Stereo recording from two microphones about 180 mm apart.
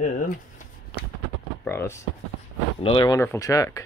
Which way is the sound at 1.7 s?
15° left (ahead or behind).